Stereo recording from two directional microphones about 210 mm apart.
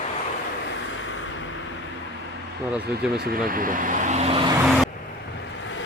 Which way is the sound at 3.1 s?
45° right (ahead or behind).